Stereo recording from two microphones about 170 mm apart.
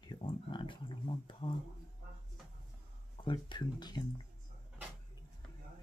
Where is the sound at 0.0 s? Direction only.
30° left (ahead or behind).